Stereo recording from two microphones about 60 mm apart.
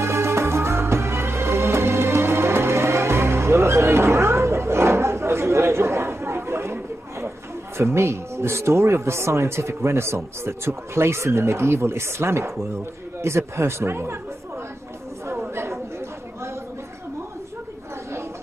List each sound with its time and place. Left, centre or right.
0.0 s music: right
7.7 s speech: right
15.5 s chatter: right